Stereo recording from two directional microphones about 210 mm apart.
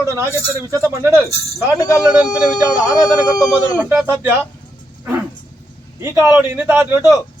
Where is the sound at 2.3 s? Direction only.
20° left (ahead or behind).